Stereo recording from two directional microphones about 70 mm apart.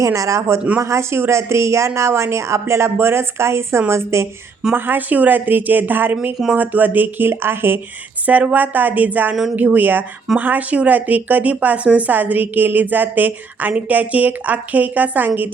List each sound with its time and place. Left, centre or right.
0.0 s speech: right
4.7 s speech: right
8.3 s speech: right